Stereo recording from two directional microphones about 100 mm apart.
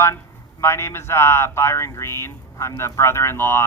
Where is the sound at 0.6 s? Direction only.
25° left (ahead or behind).